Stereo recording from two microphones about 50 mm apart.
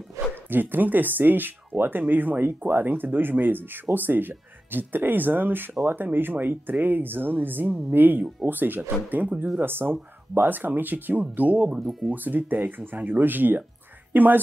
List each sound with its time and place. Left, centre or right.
0.2 s bow-wow: right
0.5 s speech: right
11.8 s speech: centre
12.1 s speech: right